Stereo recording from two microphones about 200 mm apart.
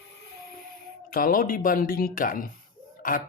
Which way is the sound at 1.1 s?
45° left (ahead or behind).